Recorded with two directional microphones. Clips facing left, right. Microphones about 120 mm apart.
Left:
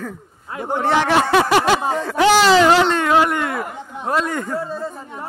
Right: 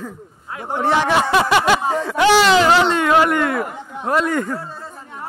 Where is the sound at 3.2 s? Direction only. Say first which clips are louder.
Right 2 dB; 25° left (ahead or behind).